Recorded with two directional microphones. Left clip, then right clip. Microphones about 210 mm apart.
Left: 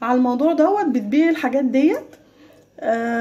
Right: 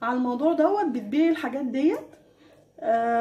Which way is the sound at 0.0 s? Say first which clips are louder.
Left 6 dB; 25° left (ahead or behind).